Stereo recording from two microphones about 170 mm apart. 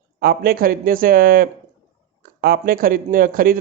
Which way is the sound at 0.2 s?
60° right (ahead or behind).